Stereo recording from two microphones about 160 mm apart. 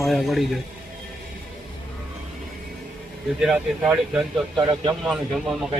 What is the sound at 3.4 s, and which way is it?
Speech, 5° right (ahead or behind).